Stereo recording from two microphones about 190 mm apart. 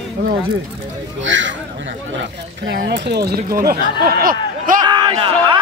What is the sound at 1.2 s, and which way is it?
Speech, 80° right.